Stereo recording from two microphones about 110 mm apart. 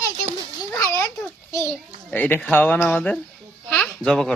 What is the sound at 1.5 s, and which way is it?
A child's voice, 25° left (ahead or behind).